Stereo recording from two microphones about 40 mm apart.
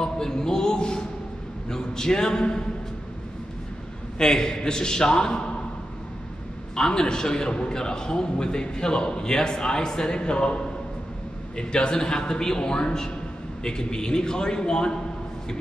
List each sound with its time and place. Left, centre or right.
0.0 s a sound: centre
1.7 s a man's voice: centre
4.2 s a man's voice: centre
6.7 s a man's voice: centre